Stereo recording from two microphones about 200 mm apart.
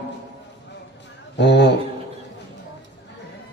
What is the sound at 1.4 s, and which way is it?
Mantra, 60° left (ahead or behind).